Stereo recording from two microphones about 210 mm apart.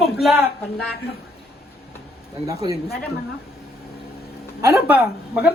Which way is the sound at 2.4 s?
15° right (ahead or behind).